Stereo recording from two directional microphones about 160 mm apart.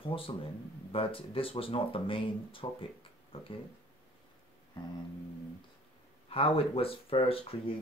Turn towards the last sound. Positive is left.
turn(degrees=35)  # may be behind; listen again after turning